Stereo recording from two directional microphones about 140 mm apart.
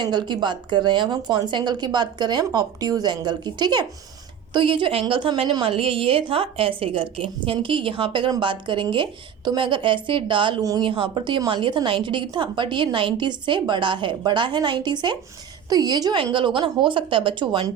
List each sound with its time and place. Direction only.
0.0 s a woman's voice: 30° right (ahead or behind)